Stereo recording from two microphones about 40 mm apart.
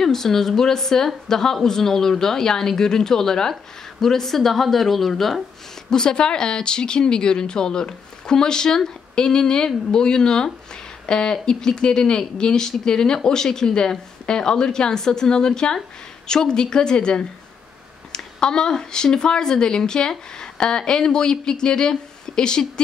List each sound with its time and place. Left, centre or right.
0.0 s speech: centre
5.9 s speech: centre